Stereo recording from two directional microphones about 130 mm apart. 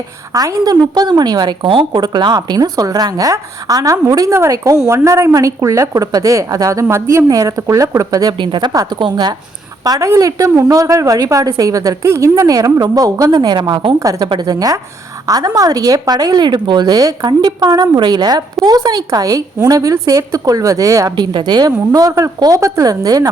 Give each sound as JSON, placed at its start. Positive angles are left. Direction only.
{"t": 0.3, "sound": "a woman's voice", "side_deg": -30}
{"t": 9.8, "sound": "a woman's voice", "side_deg": -25}